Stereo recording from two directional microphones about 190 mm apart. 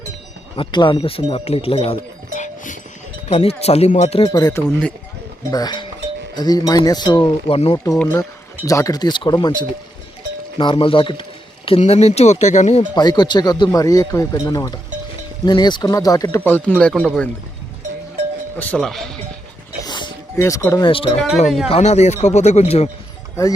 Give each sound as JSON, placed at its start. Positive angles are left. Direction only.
{"t": 0.5, "sound": "a man's voice", "side_deg": 25}
{"t": 4.3, "sound": "speech", "side_deg": 20}
{"t": 7.9, "sound": "a man's voice", "side_deg": 10}
{"t": 12.9, "sound": "speech", "side_deg": 20}
{"t": 18.5, "sound": "speech", "side_deg": 10}
{"t": 19.8, "sound": "music", "side_deg": 20}
{"t": 20.8, "sound": "a man's voice", "side_deg": 25}